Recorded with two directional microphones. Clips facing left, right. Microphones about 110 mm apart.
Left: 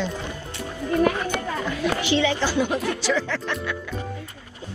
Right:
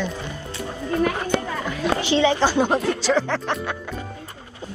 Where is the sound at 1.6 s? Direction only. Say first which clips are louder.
Right 1 dB; 20° right (ahead or behind).